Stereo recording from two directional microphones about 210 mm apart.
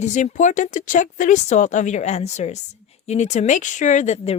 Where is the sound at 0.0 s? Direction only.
35° left (ahead or behind).